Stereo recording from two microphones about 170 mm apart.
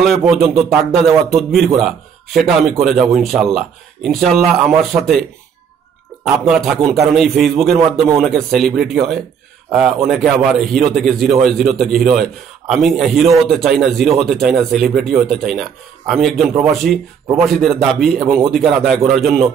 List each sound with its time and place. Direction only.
0.0 s a man's voice: centre (ahead or behind)
6.2 s a man's voice: 5° right (ahead or behind)